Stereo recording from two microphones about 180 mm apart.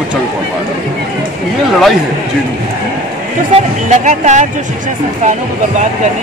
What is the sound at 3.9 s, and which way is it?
Speech, 40° right (ahead or behind).